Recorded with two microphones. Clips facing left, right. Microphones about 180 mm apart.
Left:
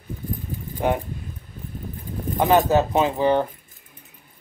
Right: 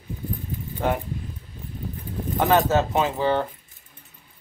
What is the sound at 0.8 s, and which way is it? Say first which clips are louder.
Speech: left 2 dB; 15° left (ahead or behind).